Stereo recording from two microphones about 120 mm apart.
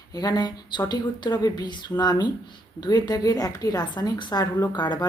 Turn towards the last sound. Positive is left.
turn(degrees=35)  # may be behind; listen again after turning